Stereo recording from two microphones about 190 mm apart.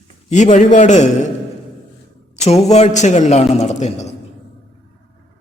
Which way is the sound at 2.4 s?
35° left (ahead or behind).